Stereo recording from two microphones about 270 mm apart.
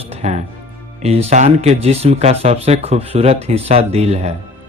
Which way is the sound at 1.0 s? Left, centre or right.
Right.